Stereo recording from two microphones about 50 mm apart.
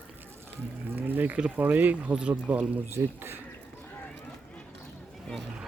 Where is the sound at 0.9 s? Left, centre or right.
Right.